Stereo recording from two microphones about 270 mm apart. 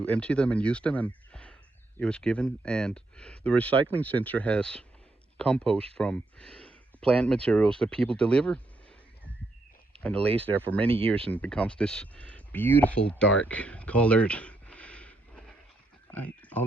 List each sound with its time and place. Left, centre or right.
0.0 s speech: centre
10.0 s speech: centre
10.8 s speech: right
11.3 s speech: centre